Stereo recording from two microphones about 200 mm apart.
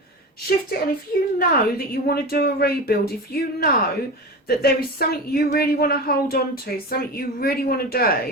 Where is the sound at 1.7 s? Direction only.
50° left (ahead or behind).